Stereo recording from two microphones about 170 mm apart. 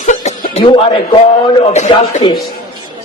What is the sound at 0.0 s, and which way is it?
Chuckle, 45° left (ahead or behind).